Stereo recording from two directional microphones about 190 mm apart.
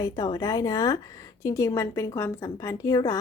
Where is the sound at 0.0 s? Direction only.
20° left (ahead or behind).